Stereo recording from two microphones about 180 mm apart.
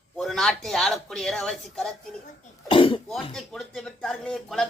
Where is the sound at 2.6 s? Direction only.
30° left (ahead or behind).